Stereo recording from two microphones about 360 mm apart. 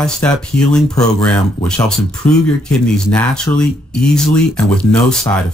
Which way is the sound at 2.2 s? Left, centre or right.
Left.